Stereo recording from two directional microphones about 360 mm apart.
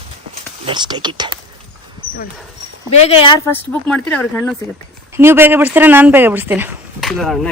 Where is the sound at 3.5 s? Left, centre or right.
Centre.